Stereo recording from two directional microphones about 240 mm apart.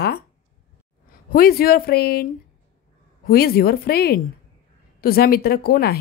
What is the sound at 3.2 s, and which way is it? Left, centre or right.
A woman's voice, left.